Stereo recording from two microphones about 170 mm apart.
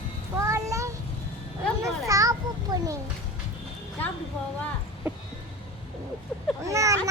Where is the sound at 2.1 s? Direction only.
20° right (ahead or behind).